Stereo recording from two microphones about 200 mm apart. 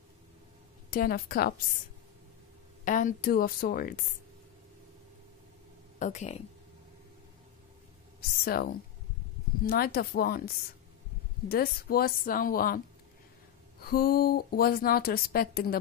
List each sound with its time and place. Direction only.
0.8 s speech: 45° left (ahead or behind)
2.8 s speech: 40° left (ahead or behind)
5.9 s speech: 35° left (ahead or behind)
8.5 s speech: 50° left (ahead or behind)